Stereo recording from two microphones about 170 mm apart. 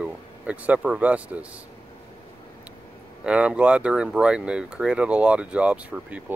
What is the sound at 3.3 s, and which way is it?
Speech, 5° right (ahead or behind).